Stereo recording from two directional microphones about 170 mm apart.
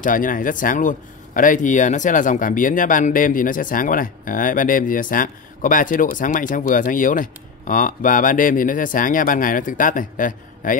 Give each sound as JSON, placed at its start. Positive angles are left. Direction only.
{"t": 0.0, "sound": "speech", "side_deg": 55}